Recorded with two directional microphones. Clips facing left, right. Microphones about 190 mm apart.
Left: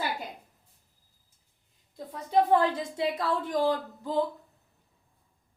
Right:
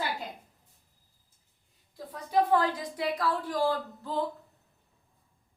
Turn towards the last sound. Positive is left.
turn(degrees=15)  # may be behind; listen again after turning